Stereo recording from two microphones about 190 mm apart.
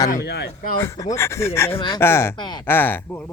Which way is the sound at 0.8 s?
15° left (ahead or behind).